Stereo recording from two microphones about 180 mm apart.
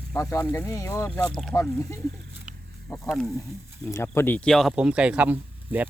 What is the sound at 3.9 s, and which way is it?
Speech, 15° left (ahead or behind).